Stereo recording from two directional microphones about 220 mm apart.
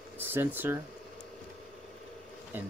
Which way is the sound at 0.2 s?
10° right (ahead or behind).